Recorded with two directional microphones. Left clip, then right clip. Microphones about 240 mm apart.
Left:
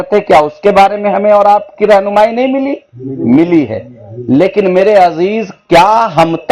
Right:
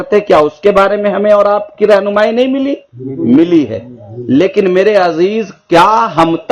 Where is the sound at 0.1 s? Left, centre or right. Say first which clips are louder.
Left 1 dB; centre.